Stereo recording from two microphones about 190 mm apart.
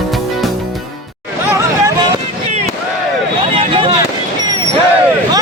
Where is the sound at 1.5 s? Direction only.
20° right (ahead or behind).